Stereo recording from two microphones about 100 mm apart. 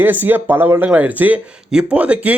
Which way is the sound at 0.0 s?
20° right (ahead or behind).